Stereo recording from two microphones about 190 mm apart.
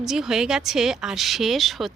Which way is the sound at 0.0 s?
Centre (ahead or behind).